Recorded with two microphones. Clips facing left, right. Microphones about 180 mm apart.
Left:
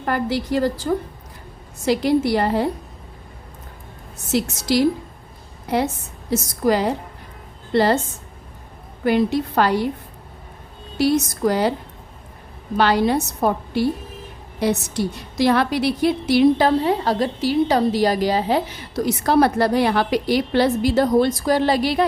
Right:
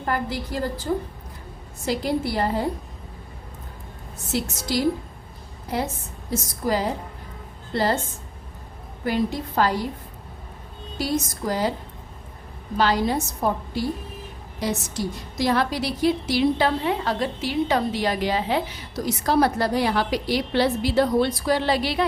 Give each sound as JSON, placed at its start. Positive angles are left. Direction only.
{"t": 0.0, "sound": "a woman's voice", "side_deg": 80}
{"t": 1.9, "sound": "a woman's voice", "side_deg": 80}
{"t": 4.7, "sound": "a woman's voice", "side_deg": 80}
{"t": 6.3, "sound": "a woman's voice", "side_deg": 75}
{"t": 9.0, "sound": "a woman's voice", "side_deg": 70}
{"t": 10.9, "sound": "a woman's voice", "side_deg": 70}
{"t": 12.7, "sound": "a woman's voice", "side_deg": 65}
{"t": 16.6, "sound": "a woman's voice", "side_deg": 35}
{"t": 19.0, "sound": "a woman's voice", "side_deg": 60}